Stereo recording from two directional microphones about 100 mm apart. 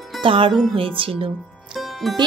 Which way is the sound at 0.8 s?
65° right (ahead or behind).